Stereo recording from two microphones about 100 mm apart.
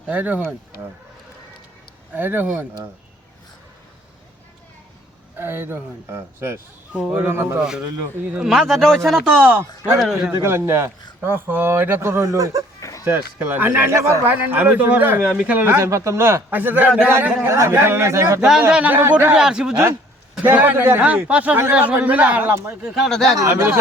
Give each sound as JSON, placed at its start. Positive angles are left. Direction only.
{"t": 0.0, "sound": "speech", "side_deg": -15}
{"t": 2.1, "sound": "a man's voice", "side_deg": -20}
{"t": 5.4, "sound": "a man's voice", "side_deg": -25}
{"t": 6.9, "sound": "speech", "side_deg": -15}
{"t": 8.4, "sound": "speech", "side_deg": 0}
{"t": 9.5, "sound": "a man's voice", "side_deg": -20}
{"t": 10.0, "sound": "speech", "side_deg": -5}
{"t": 10.4, "sound": "a man's voice", "side_deg": -25}
{"t": 13.1, "sound": "a man's voice", "side_deg": -20}
{"t": 18.3, "sound": "speech", "side_deg": -5}
{"t": 20.4, "sound": "a man's voice", "side_deg": -20}
{"t": 22.8, "sound": "speech", "side_deg": -5}
{"t": 23.5, "sound": "a man's voice", "side_deg": -25}